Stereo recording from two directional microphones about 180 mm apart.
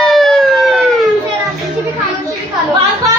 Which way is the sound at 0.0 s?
Centre (ahead or behind).